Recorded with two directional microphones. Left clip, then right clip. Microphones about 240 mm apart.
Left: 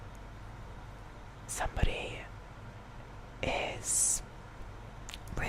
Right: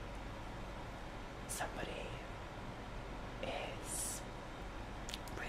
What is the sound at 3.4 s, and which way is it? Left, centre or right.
Whispering, left.